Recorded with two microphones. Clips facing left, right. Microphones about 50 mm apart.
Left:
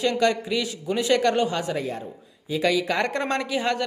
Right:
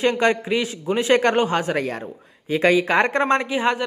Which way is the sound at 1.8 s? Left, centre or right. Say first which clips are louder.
Right 4 dB; right.